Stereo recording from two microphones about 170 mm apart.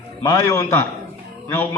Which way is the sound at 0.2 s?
15° left (ahead or behind).